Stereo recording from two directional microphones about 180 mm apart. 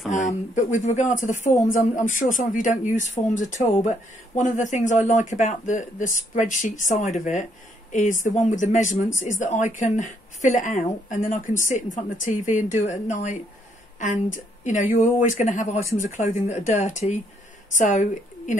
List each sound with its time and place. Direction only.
0.1 s a woman's voice: 45° left (ahead or behind)